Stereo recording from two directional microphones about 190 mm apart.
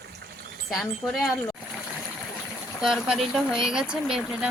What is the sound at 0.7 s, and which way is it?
Speech, centre (ahead or behind).